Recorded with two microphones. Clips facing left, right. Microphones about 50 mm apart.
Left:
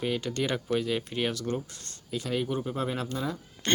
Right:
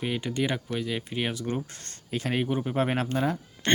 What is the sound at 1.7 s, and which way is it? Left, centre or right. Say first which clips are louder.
Speech: right 2 dB; right.